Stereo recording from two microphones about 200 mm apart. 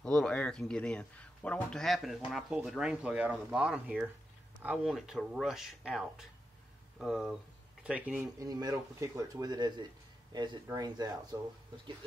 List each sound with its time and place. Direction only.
0.0 s a man's voice: 5° left (ahead or behind); by 11.8 s 20° right (ahead or behind)